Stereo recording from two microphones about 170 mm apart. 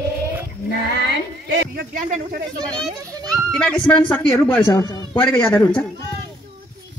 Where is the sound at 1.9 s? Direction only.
50° right (ahead or behind).